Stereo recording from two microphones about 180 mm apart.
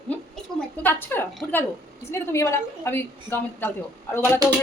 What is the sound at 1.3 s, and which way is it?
Speech, centre (ahead or behind).